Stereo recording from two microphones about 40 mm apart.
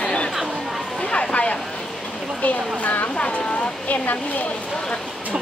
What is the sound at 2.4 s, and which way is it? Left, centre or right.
Speech, left.